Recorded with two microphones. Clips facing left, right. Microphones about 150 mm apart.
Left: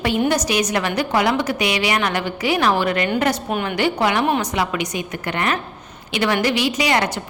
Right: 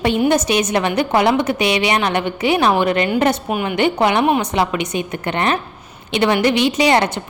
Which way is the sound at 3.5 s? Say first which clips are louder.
Right 2 dB; 10° right (ahead or behind).